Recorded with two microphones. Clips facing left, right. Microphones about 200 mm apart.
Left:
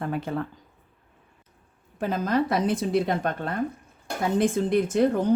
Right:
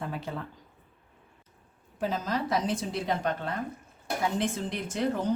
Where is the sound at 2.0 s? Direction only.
55° left (ahead or behind).